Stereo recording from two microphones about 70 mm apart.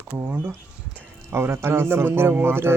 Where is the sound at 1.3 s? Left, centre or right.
Right.